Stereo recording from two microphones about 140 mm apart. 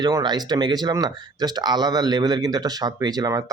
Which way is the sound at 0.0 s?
30° right (ahead or behind).